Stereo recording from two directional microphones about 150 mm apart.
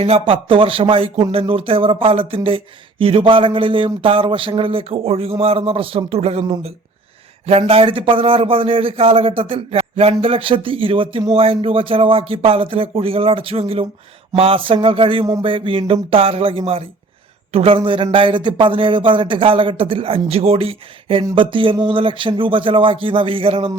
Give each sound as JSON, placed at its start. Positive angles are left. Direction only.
{"t": 0.0, "sound": "a man's voice", "side_deg": -40}
{"t": 7.7, "sound": "a man's voice", "side_deg": -35}